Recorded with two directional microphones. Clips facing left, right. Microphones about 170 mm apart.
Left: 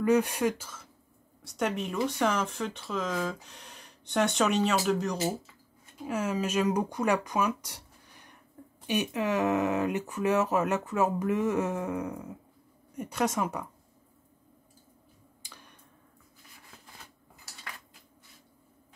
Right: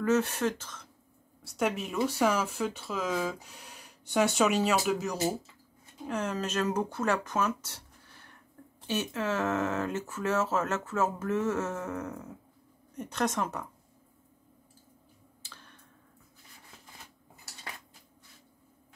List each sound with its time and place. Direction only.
0.0 s speech: 15° left (ahead or behind)
1.4 s speech: centre (ahead or behind)
6.0 s speech: 10° left (ahead or behind)
15.4 s finger snapping: 15° left (ahead or behind)